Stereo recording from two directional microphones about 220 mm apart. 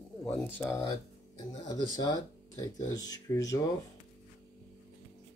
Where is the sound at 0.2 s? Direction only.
5° left (ahead or behind).